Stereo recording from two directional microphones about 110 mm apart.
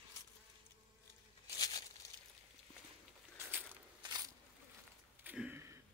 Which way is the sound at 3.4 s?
15° right (ahead or behind).